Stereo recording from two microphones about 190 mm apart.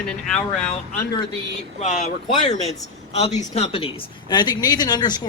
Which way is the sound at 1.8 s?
40° left (ahead or behind).